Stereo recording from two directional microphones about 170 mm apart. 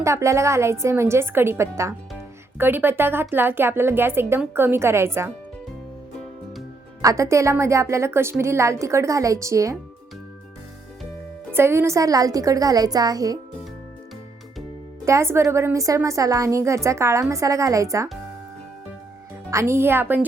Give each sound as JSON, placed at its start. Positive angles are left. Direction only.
{"t": 0.0, "sound": "a woman's voice", "side_deg": -15}
{"t": 7.0, "sound": "a woman's voice", "side_deg": -20}
{"t": 11.5, "sound": "a woman's voice", "side_deg": -15}
{"t": 15.0, "sound": "a woman's voice", "side_deg": -15}
{"t": 19.5, "sound": "a woman's voice", "side_deg": -15}